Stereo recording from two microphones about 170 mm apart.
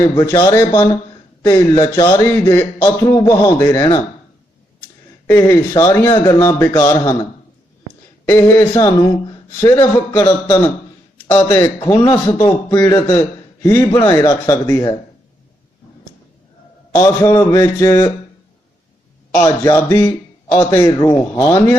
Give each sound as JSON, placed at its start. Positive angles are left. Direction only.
{"t": 0.0, "sound": "a man's voice", "side_deg": 15}
{"t": 5.2, "sound": "a man's voice", "side_deg": 15}
{"t": 8.3, "sound": "a man's voice", "side_deg": 15}
{"t": 16.9, "sound": "a man's voice", "side_deg": 20}
{"t": 19.4, "sound": "a man's voice", "side_deg": 15}